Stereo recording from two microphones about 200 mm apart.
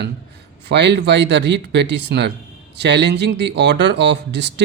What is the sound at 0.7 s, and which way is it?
Speech, 60° right (ahead or behind).